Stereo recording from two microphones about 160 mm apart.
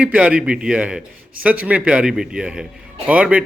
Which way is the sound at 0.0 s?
5° right (ahead or behind).